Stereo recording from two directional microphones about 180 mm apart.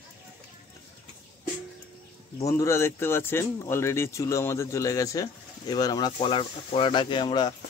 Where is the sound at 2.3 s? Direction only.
15° left (ahead or behind).